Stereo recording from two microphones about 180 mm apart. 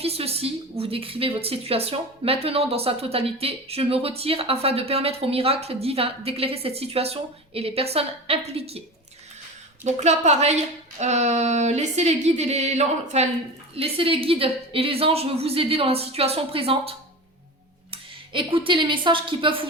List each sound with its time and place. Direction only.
0.0 s speech: 35° right (ahead or behind)
9.8 s speech: 40° right (ahead or behind)
17.9 s speech: 30° right (ahead or behind)